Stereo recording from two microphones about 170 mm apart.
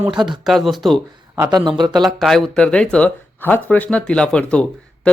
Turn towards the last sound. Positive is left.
turn(degrees=5)  # may be behind; listen again after turning